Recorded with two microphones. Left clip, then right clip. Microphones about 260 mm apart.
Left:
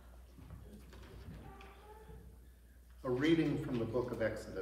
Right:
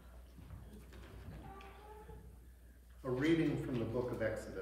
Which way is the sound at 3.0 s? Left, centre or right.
Centre.